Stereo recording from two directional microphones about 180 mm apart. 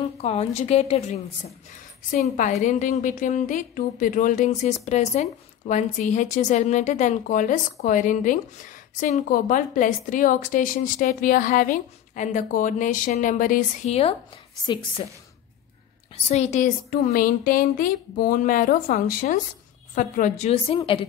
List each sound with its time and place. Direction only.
0.2 s a woman's voice: 35° left (ahead or behind)
14.7 s a woman's voice: 25° left (ahead or behind)
16.3 s a woman's voice: 40° left (ahead or behind)